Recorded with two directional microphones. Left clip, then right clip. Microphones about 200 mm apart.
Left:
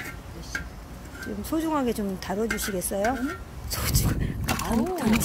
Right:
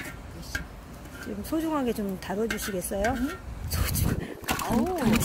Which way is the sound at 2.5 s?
40° right (ahead or behind).